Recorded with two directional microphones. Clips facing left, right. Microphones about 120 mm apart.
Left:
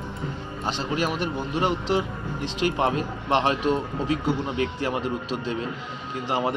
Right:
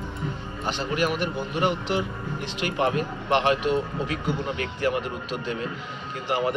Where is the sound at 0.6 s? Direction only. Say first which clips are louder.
Right 1 dB; 30° left (ahead or behind).